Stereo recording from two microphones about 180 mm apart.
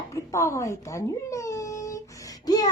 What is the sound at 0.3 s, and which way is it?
A child's voice, 15° left (ahead or behind).